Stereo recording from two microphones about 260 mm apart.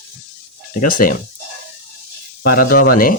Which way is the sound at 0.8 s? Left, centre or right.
Left.